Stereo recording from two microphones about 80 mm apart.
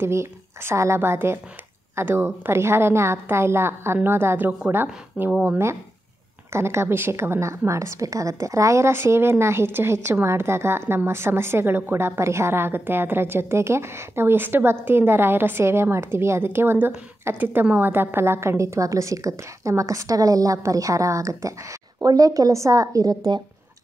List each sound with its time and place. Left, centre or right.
0.0 s a woman's voice: right
5.2 s speech: centre
6.5 s a woman's voice: right